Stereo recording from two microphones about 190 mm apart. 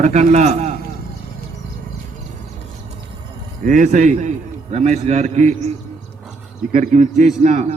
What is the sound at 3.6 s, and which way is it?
A man's voice, 40° right (ahead or behind).